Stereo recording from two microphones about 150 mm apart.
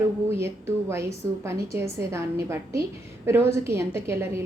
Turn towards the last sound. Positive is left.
turn(degrees=-15)  # may be behind; listen again after turning